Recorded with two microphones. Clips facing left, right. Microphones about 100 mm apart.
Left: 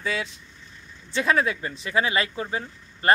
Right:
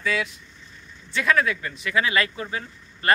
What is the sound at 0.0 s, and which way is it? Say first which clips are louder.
Speech: right 3 dB; 30° left (ahead or behind).